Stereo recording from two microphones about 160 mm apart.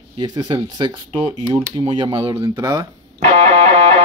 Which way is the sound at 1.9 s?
30° right (ahead or behind).